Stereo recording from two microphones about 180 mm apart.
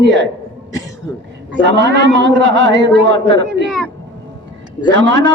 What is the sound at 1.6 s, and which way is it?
A man's voice, 80° right.